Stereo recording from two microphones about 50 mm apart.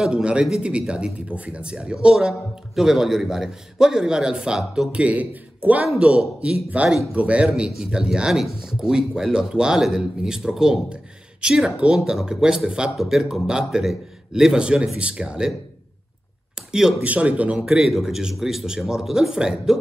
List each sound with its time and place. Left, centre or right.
0.0 s speech: centre
4.9 s speech: right
5.9 s speech: right
12.0 s speech: centre
12.9 s a man's voice: centre
13.2 s speech: centre
16.5 s a sound: centre
17.0 s speech: right
17.6 s speech: centre